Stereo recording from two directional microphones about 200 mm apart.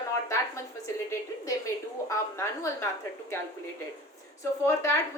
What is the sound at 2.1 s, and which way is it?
Speech, 15° left (ahead or behind).